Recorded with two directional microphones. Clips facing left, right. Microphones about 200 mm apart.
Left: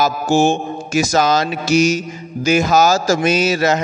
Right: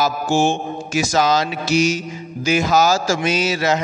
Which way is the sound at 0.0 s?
40° left (ahead or behind).